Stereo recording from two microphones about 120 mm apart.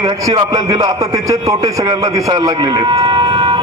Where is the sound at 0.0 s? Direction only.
35° right (ahead or behind).